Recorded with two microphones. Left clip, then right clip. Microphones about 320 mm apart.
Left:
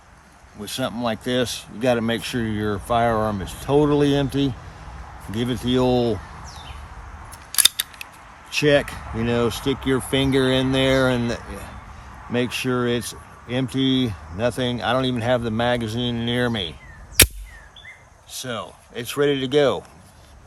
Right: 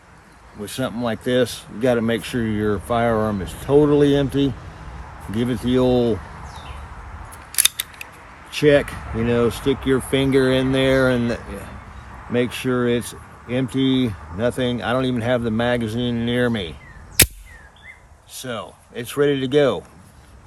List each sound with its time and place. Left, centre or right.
0.6 s speech: left
7.5 s scissors: centre
8.5 s speech: left
18.3 s speech: left